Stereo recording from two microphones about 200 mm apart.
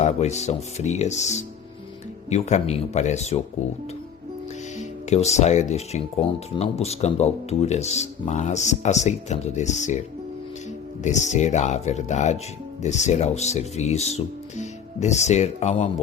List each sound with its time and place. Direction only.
0.0 s speech: 35° left (ahead or behind)
4.8 s speech: 35° left (ahead or behind)
11.0 s speech: 35° left (ahead or behind)